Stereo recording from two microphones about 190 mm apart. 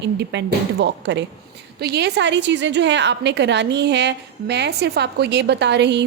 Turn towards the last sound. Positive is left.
turn(degrees=-65)  # may be behind; listen again after turning